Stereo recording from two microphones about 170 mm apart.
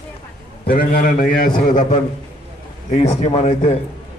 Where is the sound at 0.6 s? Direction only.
55° left (ahead or behind).